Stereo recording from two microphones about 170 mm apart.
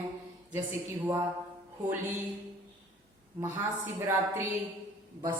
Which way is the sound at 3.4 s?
10° right (ahead or behind).